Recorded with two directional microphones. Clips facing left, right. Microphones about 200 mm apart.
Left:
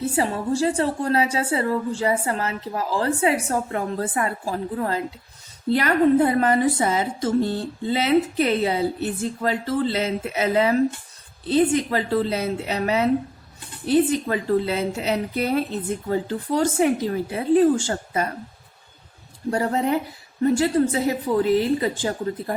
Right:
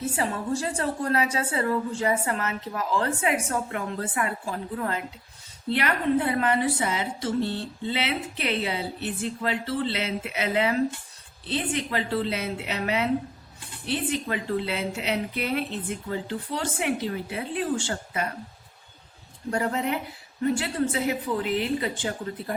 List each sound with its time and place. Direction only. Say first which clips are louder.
0.0 s a woman's voice: left 5 dB; 30° left (ahead or behind)
19.5 s a woman's voice: left 5 dB; 35° left (ahead or behind)